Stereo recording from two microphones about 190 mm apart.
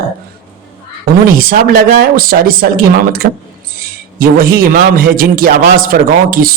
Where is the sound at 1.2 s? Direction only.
50° right (ahead or behind).